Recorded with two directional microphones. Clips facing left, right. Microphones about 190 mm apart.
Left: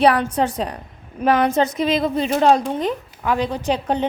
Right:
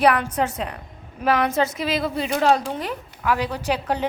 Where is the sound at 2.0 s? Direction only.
30° left (ahead or behind).